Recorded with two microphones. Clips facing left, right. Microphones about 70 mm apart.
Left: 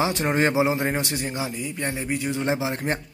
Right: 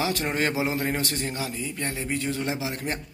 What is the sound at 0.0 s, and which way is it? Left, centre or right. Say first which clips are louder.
Speech: left 4 dB; left.